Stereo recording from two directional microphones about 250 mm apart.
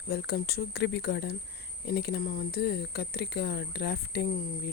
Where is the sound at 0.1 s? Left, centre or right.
Left.